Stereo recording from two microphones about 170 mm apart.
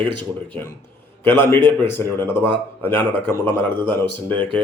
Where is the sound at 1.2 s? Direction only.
15° left (ahead or behind).